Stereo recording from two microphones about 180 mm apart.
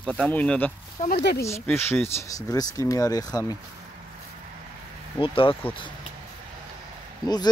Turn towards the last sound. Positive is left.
turn(degrees=20)  # may be behind; listen again after turning